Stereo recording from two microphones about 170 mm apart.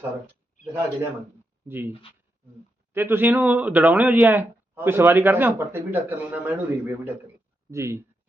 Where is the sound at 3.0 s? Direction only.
15° right (ahead or behind).